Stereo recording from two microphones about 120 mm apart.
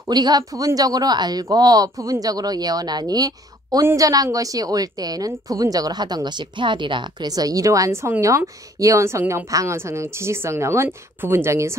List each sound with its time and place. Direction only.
0.1 s a woman's voice: 35° right (ahead or behind)